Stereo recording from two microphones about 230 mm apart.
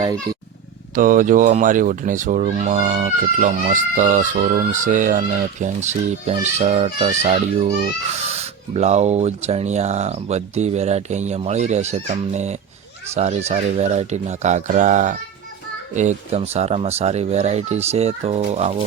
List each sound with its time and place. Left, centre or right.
0.0 s speech: centre
0.9 s speech: right
8.3 s speech: right